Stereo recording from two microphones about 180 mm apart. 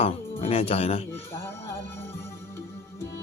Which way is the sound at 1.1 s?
15° left (ahead or behind).